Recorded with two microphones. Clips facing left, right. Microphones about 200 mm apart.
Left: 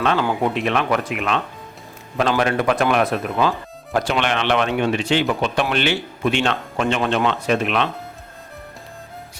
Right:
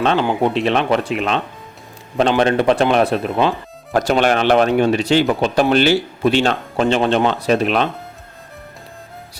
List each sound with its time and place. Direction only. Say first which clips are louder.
0.0 s speech: right 3 dB; 30° right (ahead or behind)
2.4 s speech: right 5 dB; 30° right (ahead or behind)
3.9 s speech: right 5 dB; 40° right (ahead or behind)